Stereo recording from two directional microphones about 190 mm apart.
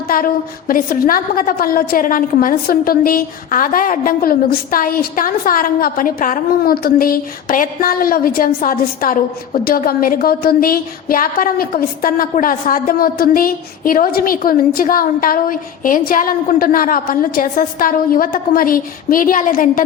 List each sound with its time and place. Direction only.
0.1 s a woman's voice: 50° left (ahead or behind)